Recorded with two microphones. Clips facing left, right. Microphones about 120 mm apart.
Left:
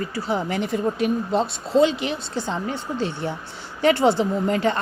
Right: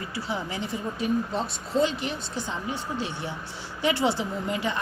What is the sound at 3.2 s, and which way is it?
Speech, 50° left (ahead or behind).